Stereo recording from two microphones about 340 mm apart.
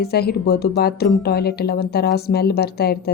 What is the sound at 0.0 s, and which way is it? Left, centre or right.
Speech, left.